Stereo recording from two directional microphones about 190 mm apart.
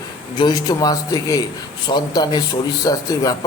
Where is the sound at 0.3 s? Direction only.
20° left (ahead or behind).